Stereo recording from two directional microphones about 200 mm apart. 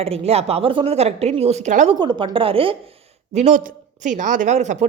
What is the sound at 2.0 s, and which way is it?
Speech, 20° right (ahead or behind).